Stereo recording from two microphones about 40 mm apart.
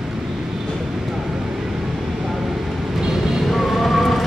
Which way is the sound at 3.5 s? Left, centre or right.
Centre.